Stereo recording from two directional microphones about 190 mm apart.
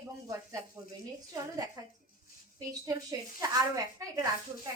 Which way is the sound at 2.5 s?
20° right (ahead or behind).